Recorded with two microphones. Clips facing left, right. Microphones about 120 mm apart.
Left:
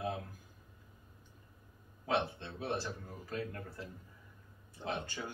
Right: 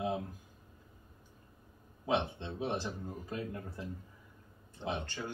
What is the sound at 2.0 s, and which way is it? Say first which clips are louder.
Speech: right 1 dB; 20° right (ahead or behind).